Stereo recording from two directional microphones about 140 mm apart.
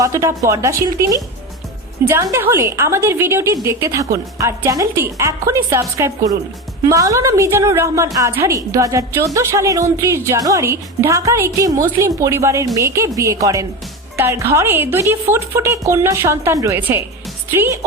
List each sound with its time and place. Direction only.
0.0 s a woman's voice: 25° right (ahead or behind)